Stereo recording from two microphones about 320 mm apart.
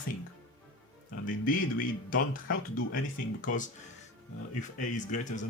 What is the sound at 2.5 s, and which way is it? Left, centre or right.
Speech, left.